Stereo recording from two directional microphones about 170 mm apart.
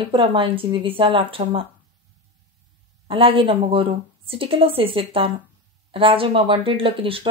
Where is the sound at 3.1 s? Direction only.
30° right (ahead or behind).